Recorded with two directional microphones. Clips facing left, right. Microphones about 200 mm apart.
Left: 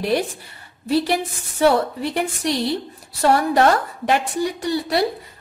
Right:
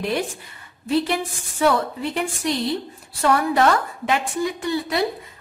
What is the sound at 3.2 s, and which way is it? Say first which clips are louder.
A woman's voice: left 2 dB; 35° left (ahead or behind).